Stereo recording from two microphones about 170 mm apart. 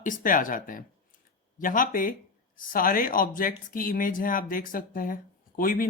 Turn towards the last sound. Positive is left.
turn(degrees=55)  # may be behind; listen again after turning